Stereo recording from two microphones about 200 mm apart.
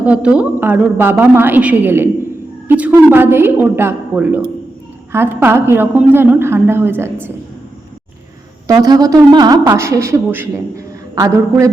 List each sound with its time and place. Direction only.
0.0 s speech: 5° right (ahead or behind)
8.6 s speech: 20° right (ahead or behind)